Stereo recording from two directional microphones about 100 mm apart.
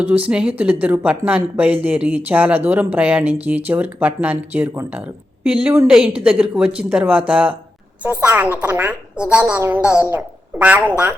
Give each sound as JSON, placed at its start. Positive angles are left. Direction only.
{"t": 0.0, "sound": "speech", "side_deg": -15}